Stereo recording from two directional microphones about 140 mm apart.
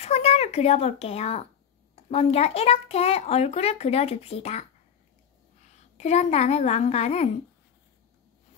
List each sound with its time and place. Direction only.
0.0 s a child's voice: 45° left (ahead or behind)
5.9 s a child's voice: 50° left (ahead or behind)